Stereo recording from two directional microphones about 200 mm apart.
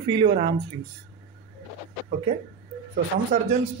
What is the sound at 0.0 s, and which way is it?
Speech, 25° right (ahead or behind).